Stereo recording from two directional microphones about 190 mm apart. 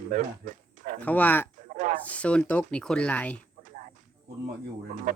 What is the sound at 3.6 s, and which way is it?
Snake, 40° right (ahead or behind).